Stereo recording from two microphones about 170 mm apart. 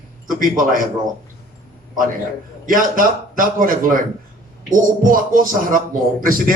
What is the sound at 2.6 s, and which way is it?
A man's voice, 55° right (ahead or behind).